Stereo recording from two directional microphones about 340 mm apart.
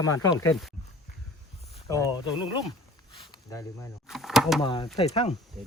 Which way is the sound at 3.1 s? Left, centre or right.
Centre.